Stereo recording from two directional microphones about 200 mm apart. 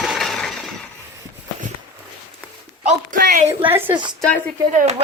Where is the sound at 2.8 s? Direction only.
45° right (ahead or behind).